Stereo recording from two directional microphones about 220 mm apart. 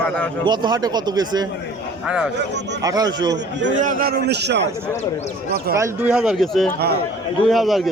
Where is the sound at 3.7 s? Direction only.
40° right (ahead or behind).